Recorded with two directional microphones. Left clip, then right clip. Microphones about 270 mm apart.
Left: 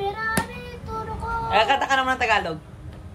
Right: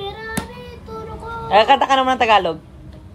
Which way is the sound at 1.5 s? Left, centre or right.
Right.